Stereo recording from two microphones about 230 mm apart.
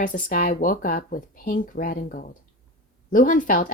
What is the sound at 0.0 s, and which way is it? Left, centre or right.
Speech, left.